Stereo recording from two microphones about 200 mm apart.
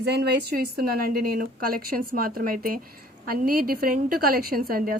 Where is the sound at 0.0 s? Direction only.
55° right (ahead or behind).